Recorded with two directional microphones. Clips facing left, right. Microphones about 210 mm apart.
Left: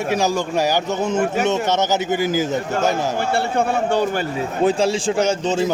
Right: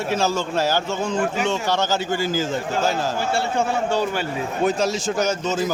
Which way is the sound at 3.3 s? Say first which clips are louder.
Left 3 dB; 55° left (ahead or behind).